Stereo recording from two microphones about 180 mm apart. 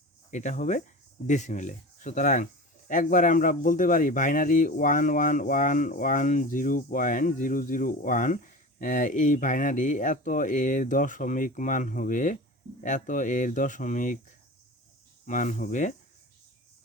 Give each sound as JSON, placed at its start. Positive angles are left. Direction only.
{"t": 0.3, "sound": "speech", "side_deg": 45}
{"t": 15.3, "sound": "speech", "side_deg": 45}